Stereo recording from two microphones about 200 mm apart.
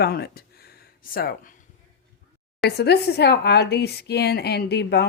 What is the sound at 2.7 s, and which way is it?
A woman's voice, 55° left (ahead or behind).